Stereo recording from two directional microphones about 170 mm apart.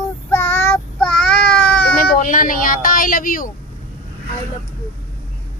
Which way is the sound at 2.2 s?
50° left (ahead or behind).